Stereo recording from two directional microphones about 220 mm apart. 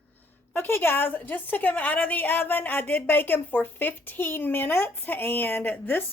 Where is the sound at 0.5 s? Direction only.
10° left (ahead or behind).